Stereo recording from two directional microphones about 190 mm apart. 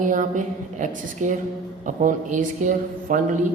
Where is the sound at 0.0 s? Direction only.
40° right (ahead or behind).